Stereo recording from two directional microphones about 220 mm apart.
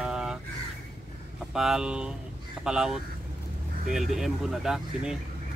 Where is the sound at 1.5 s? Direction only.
Centre (ahead or behind).